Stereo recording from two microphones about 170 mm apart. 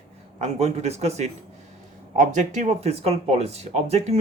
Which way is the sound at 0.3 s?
40° right (ahead or behind).